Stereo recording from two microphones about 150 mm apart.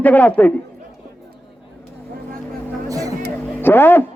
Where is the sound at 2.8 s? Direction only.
20° right (ahead or behind).